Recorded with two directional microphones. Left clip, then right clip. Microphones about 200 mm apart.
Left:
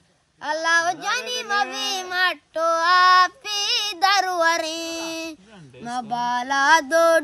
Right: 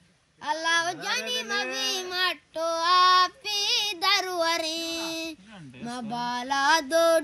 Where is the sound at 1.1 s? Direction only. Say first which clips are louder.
Left 5 dB; 20° left (ahead or behind).